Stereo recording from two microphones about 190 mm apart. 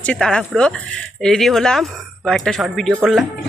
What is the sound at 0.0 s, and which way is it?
Speech, 5° left (ahead or behind).